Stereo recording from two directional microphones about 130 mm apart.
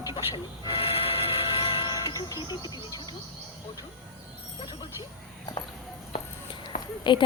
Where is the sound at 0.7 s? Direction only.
45° left (ahead or behind).